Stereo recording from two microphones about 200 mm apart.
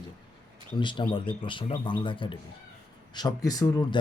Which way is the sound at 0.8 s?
25° left (ahead or behind).